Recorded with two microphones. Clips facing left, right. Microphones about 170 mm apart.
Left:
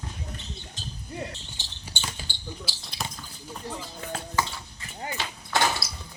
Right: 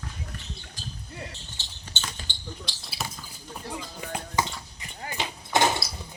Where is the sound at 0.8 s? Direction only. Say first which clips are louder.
Even; 20° left (ahead or behind).